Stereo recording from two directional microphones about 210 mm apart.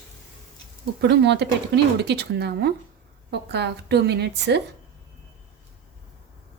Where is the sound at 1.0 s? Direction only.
55° right (ahead or behind).